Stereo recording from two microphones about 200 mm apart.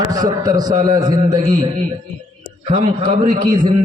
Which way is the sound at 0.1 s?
20° right (ahead or behind).